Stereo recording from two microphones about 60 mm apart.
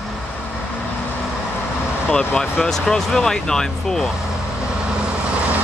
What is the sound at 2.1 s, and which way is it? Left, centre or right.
Speech, centre.